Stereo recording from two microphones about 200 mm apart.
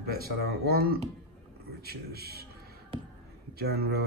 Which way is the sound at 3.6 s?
55° right (ahead or behind).